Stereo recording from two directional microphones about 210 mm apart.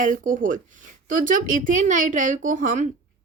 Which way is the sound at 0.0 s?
40° right (ahead or behind).